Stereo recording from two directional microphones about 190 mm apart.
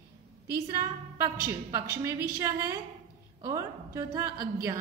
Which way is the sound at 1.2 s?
15° right (ahead or behind).